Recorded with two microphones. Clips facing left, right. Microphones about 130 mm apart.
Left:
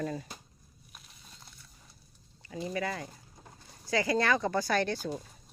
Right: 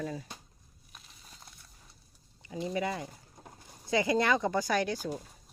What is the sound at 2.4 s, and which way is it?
Speech, 20° right (ahead or behind).